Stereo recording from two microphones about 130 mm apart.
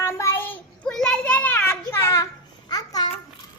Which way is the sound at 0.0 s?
20° left (ahead or behind).